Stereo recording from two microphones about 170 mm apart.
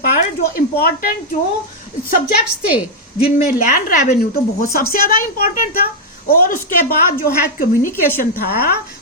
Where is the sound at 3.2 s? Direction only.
45° left (ahead or behind).